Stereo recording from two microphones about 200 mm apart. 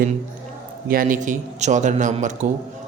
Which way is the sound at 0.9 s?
45° right (ahead or behind).